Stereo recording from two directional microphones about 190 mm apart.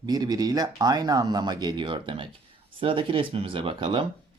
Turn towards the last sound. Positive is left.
turn(degrees=-25)  # may be behind; listen again after turning